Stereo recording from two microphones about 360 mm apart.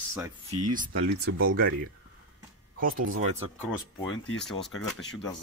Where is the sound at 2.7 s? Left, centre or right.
Right.